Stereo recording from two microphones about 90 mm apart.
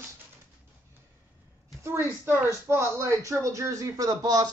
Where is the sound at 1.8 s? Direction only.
25° right (ahead or behind).